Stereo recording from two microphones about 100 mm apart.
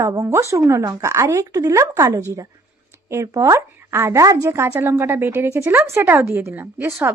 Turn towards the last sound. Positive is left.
turn(degrees=-25)  # may be behind; listen again after turning